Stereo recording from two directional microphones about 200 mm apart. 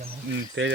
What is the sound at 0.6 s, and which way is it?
Speech, 65° right (ahead or behind).